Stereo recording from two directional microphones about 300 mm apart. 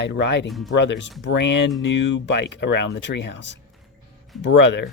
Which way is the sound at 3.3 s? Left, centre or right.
Left.